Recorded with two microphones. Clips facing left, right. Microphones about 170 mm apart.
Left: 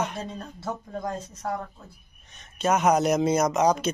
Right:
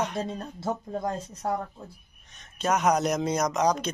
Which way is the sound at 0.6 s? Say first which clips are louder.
Right 2 dB; 25° right (ahead or behind).